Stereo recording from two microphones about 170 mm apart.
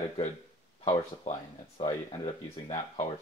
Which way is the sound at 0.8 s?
35° left (ahead or behind).